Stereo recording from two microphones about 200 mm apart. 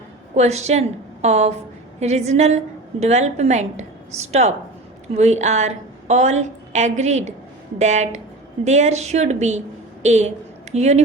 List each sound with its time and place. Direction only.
0.3 s a woman's voice: 35° right (ahead or behind)